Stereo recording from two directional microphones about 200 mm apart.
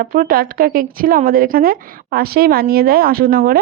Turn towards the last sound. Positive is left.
turn(degrees=-50)  # may be behind; listen again after turning